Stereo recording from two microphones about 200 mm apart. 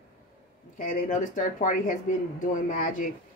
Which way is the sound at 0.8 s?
40° left (ahead or behind).